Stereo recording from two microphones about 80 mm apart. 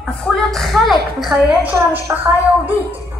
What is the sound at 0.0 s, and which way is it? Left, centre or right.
A woman's voice, centre.